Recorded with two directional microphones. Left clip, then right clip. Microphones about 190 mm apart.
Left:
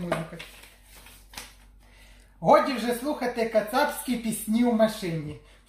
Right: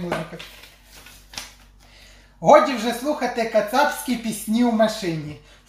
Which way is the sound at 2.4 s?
10° left (ahead or behind).